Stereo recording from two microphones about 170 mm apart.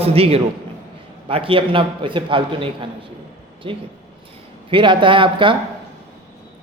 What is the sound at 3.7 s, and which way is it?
A man's voice, 30° right (ahead or behind).